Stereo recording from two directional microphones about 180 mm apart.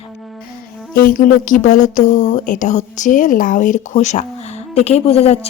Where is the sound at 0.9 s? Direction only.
50° left (ahead or behind).